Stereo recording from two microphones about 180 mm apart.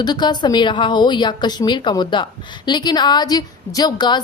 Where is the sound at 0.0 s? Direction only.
25° left (ahead or behind).